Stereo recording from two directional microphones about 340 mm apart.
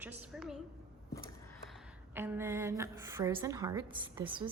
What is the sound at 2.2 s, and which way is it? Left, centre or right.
A woman's voice, centre.